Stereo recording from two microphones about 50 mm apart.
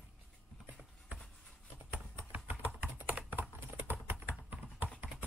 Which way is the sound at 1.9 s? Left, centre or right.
Right.